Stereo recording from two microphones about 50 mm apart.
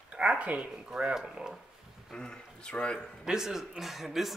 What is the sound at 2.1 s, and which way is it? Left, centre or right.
Speech, centre.